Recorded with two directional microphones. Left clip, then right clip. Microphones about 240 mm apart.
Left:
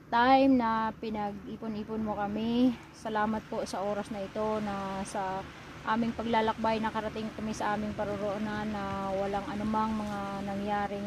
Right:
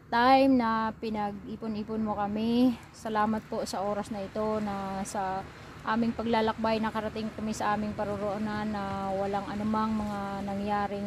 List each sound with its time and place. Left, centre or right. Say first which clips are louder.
0.1 s speech: right 1 dB; right